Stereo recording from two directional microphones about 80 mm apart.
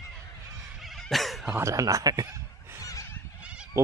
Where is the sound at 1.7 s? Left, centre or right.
Right.